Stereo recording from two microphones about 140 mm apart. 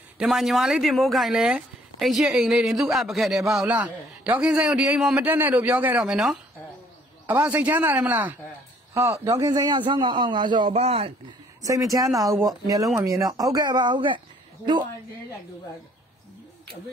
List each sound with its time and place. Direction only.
0.2 s a man's voice: centre (ahead or behind); by 10.7 s 35° right (ahead or behind)
10.7 s speech: 45° right (ahead or behind)
11.6 s speech: 25° right (ahead or behind)